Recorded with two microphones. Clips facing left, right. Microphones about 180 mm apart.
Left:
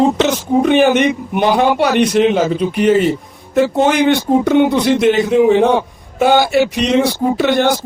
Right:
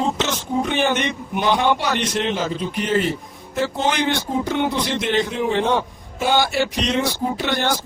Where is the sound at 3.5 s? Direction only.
65° left (ahead or behind).